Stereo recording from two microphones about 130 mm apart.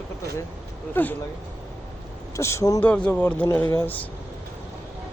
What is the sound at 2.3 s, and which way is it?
Speech, 20° left (ahead or behind).